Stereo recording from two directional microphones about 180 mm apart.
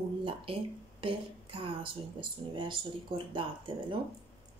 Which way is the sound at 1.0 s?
30° right (ahead or behind).